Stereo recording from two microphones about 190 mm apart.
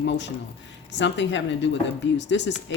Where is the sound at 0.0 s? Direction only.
70° left (ahead or behind).